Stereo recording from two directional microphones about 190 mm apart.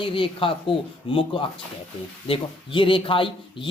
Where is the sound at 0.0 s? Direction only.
30° left (ahead or behind).